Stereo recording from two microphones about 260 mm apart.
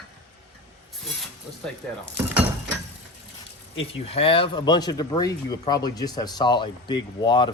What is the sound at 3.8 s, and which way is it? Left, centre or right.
Speech, left.